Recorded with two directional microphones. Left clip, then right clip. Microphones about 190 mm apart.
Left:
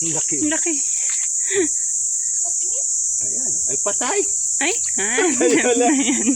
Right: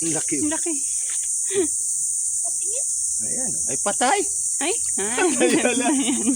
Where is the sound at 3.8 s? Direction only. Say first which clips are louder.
Right 3 dB; 45° right (ahead or behind).